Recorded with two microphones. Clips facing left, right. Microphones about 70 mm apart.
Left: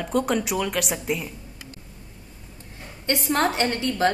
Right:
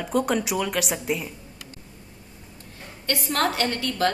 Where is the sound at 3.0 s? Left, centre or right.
Left.